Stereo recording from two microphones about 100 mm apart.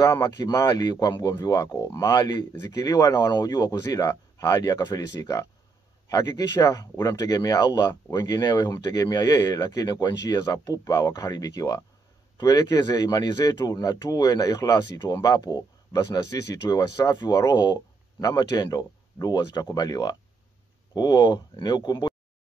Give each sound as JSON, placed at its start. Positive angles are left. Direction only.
{"t": 0.0, "sound": "speech", "side_deg": 35}
{"t": 2.1, "sound": "speech", "side_deg": 40}